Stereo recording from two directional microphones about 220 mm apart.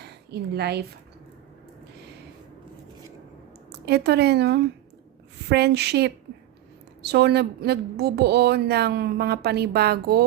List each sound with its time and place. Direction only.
0.0 s a woman's voice: 50° right (ahead or behind)
3.7 s a woman's voice: 50° right (ahead or behind)